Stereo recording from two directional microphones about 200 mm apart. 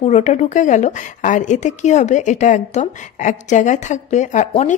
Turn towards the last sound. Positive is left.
turn(degrees=35)  # may be behind; listen again after turning